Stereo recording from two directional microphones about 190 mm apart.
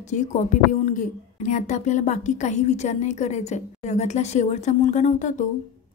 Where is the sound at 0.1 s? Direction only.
40° left (ahead or behind).